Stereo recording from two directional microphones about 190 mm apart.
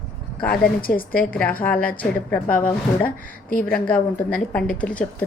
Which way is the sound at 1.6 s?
5° left (ahead or behind).